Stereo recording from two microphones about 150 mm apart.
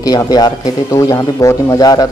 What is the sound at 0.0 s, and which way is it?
A man's voice, 25° left (ahead or behind).